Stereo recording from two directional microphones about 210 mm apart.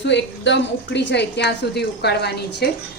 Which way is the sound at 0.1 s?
55° left (ahead or behind).